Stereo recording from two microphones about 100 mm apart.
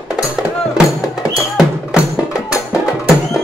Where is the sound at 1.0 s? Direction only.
35° left (ahead or behind).